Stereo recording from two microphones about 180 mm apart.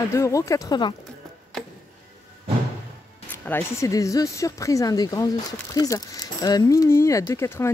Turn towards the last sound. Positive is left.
turn(degrees=15)  # may be behind; listen again after turning